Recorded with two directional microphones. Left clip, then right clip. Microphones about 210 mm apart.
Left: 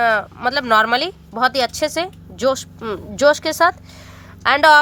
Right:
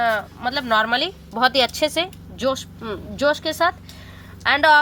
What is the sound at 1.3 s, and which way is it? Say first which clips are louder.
Speech: even; 10° left (ahead or behind).